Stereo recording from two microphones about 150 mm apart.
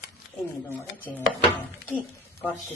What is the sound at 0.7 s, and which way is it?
Speech, 10° left (ahead or behind).